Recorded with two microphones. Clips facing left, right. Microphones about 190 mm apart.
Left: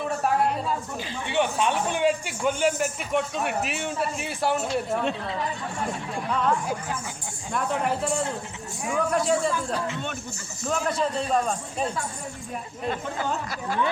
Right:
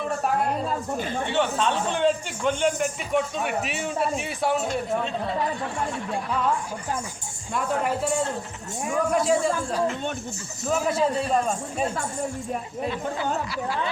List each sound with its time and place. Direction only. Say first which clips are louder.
0.9 s speech: right 5 dB; 50° right (ahead or behind)
1.3 s speech: left 1 dB; 15° left (ahead or behind)
7.5 s speech: right 1 dB; centre (ahead or behind)
10.7 s speech: right 3 dB; 5° right (ahead or behind)
12.9 s speech: even; 45° left (ahead or behind)